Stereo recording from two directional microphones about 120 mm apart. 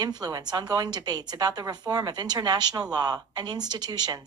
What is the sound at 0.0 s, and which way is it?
A woman's voice, 35° right (ahead or behind).